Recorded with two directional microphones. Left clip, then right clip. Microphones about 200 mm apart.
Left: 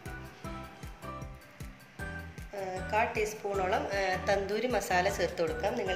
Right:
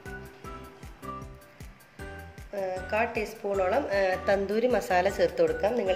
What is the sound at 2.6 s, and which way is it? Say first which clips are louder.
Speech: right 2 dB; 45° right (ahead or behind).